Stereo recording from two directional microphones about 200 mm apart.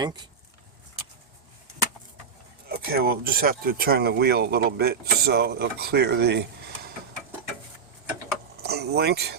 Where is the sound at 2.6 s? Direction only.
50° right (ahead or behind).